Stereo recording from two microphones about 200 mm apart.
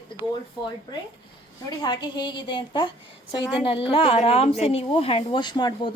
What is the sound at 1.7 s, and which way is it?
A woman's voice, 20° left (ahead or behind).